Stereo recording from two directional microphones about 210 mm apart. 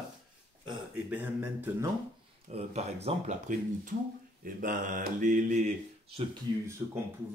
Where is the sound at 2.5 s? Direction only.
30° right (ahead or behind).